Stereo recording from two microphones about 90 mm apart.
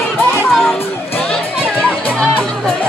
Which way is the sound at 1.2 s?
10° left (ahead or behind).